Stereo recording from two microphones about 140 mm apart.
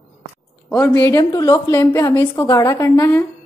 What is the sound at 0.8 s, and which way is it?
A woman's voice, 20° left (ahead or behind).